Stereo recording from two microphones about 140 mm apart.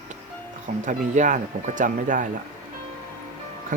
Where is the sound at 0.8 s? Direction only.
60° right (ahead or behind).